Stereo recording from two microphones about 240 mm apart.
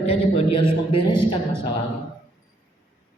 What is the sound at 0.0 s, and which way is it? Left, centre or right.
A man's voice, left.